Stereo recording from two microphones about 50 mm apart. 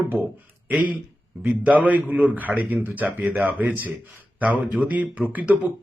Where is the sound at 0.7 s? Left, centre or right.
Right.